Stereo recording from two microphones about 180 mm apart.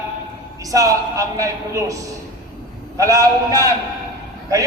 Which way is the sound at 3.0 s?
20° right (ahead or behind).